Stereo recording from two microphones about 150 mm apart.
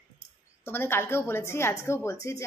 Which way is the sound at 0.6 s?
15° left (ahead or behind).